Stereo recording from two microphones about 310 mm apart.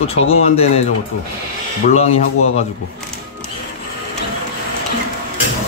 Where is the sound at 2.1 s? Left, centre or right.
Left.